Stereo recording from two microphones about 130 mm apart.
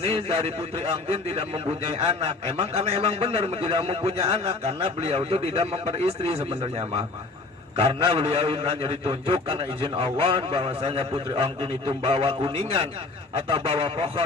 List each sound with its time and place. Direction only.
0.0 s a man's voice: 50° right (ahead or behind)